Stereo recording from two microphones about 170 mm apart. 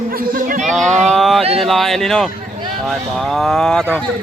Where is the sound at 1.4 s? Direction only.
35° right (ahead or behind).